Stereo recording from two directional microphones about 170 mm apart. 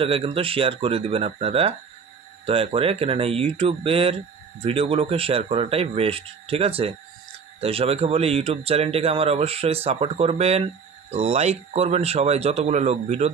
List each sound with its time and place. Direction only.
0.0 s speech: 35° right (ahead or behind)